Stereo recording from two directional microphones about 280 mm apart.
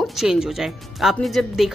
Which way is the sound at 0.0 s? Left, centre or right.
Centre.